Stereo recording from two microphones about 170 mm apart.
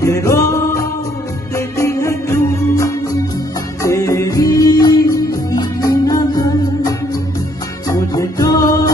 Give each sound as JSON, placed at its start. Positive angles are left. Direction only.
{"t": 0.0, "sound": "music", "side_deg": 20}